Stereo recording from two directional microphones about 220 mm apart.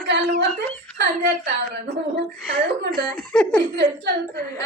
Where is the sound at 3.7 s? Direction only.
50° right (ahead or behind).